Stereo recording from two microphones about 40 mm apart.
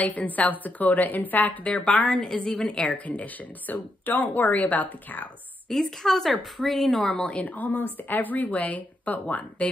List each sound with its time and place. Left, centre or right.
0.0 s speech: left
1.6 s a woman's voice: left
2.1 s a woman's voice: left
2.8 s speech: left
5.7 s a woman's voice: centre
7.4 s speech: left